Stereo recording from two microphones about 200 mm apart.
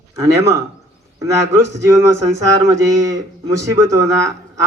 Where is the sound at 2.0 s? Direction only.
15° right (ahead or behind).